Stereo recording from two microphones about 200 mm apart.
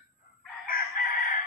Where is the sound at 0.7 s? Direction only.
45° left (ahead or behind).